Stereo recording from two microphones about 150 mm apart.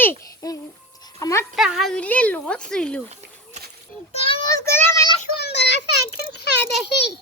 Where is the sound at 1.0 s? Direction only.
20° left (ahead or behind).